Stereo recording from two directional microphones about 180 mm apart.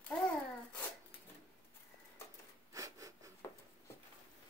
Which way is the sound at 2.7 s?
20° right (ahead or behind).